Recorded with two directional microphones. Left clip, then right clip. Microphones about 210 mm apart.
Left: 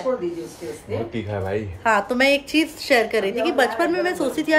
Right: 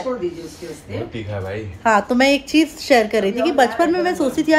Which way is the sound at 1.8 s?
5° left (ahead or behind).